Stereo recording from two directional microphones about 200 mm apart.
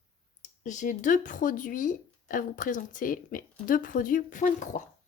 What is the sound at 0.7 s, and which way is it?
Speech, 40° left (ahead or behind).